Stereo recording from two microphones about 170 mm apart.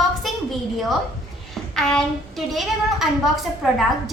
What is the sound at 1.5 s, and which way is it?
A woman's voice, 5° left (ahead or behind).